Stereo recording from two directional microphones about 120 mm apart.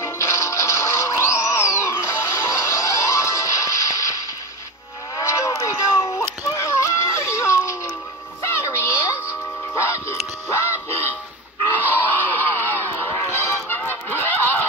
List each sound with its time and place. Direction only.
0.0 s music: 25° left (ahead or behind)
5.1 s a sound: 25° left (ahead or behind)
6.5 s music: 25° left (ahead or behind)
9.8 s a sound: 20° left (ahead or behind)
10.5 s music: 20° left (ahead or behind)
11.6 s grunt: 15° left (ahead or behind)